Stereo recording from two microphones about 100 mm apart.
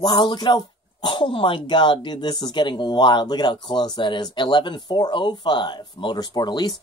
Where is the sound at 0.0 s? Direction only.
50° left (ahead or behind).